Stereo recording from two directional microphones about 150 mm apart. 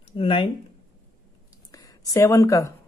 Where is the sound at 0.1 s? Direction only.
35° left (ahead or behind).